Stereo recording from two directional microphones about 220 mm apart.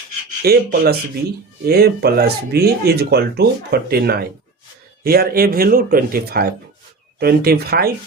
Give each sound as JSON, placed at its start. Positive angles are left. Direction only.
{"t": 0.4, "sound": "speech", "side_deg": -45}